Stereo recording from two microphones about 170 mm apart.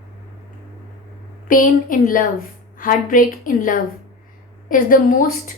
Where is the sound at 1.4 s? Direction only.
55° left (ahead or behind).